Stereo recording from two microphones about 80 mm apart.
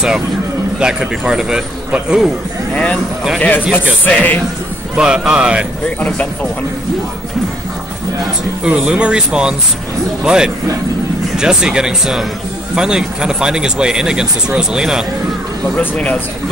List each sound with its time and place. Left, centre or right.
0.7 s speech: centre
2.7 s speech: centre
4.9 s speech: centre
5.9 s speech: centre
8.6 s speech: centre